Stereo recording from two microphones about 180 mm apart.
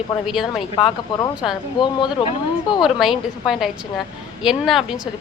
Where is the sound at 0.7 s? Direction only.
30° left (ahead or behind).